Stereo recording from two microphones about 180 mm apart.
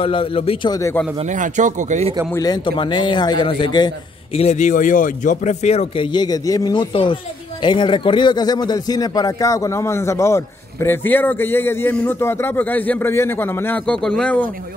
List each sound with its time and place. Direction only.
0.0 s a man's voice: 30° left (ahead or behind)
1.1 s speech: 40° right (ahead or behind)
2.3 s a man's voice: 20° left (ahead or behind)
6.1 s a man's voice: 20° left (ahead or behind); by 14.4 s 5° left (ahead or behind)